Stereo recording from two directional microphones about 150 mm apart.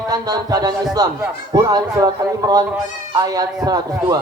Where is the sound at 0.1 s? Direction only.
25° right (ahead or behind).